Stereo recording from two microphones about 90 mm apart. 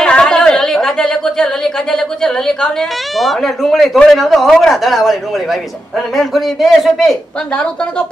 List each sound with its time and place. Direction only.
0.0 s a woman's voice: 10° left (ahead or behind)